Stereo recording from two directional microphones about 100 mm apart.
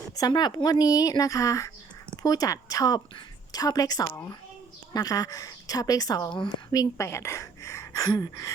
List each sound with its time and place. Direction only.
0.2 s speech: 45° left (ahead or behind)
6.7 s a woman's voice: 30° left (ahead or behind)